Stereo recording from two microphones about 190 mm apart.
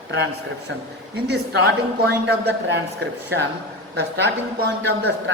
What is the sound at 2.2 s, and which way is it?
Speech, 70° right (ahead or behind).